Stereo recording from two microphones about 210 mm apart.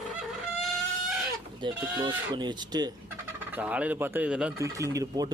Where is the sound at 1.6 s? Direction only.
20° right (ahead or behind).